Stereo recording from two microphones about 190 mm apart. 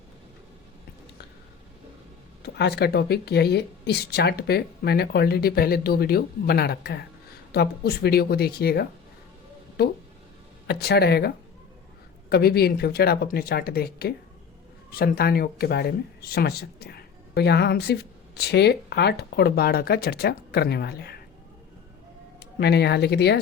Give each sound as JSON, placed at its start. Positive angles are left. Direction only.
{"t": 2.4, "sound": "a woman's voice", "side_deg": 60}
{"t": 12.3, "sound": "a woman's voice", "side_deg": 55}
{"t": 22.4, "sound": "speech", "side_deg": 60}